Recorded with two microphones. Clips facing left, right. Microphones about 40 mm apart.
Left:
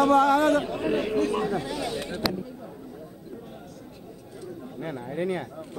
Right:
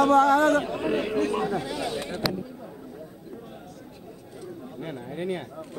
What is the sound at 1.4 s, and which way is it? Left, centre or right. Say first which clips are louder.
Speech: even; centre.